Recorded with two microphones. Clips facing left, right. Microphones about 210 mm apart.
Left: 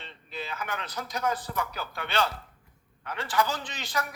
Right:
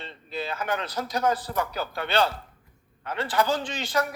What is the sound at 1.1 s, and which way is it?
A man's voice, 35° right (ahead or behind).